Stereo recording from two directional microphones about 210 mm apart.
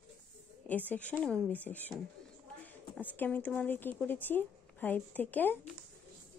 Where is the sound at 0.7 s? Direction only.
10° left (ahead or behind).